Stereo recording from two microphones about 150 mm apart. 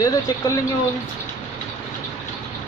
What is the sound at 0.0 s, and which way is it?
Speech, 20° left (ahead or behind).